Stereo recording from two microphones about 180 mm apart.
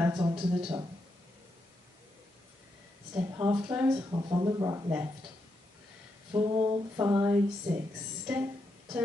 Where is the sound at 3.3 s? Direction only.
20° right (ahead or behind).